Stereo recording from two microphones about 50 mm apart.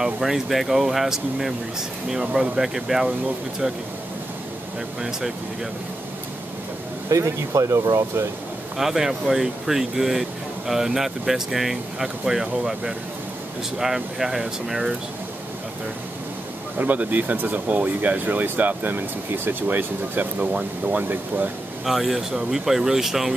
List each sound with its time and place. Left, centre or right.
0.0 s speech: centre
7.1 s speech: right
8.7 s speech: centre
16.7 s speech: right
21.8 s speech: centre